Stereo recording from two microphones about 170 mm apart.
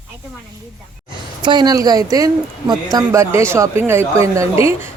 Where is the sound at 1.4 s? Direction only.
25° right (ahead or behind).